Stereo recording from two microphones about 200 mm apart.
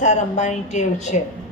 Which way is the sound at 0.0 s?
35° left (ahead or behind).